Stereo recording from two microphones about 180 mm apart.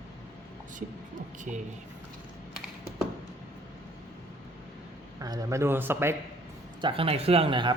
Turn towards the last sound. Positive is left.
turn(degrees=-30)  # may be behind; listen again after turning